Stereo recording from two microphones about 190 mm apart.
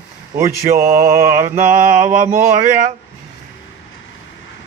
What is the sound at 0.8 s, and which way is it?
Mantra, 50° right (ahead or behind).